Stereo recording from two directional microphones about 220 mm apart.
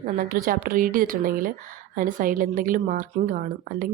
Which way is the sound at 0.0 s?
40° right (ahead or behind).